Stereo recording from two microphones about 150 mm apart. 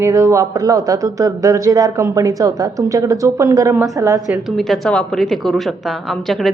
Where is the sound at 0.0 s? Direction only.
20° right (ahead or behind).